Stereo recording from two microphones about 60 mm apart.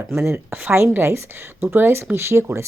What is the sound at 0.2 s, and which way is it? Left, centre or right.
Speech, right.